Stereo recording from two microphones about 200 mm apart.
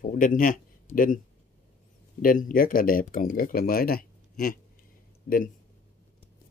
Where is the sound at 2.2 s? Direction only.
45° left (ahead or behind).